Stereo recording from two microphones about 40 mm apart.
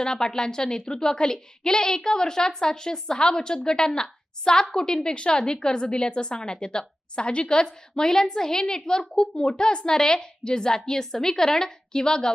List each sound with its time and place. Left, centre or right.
0.0 s a woman's voice: centre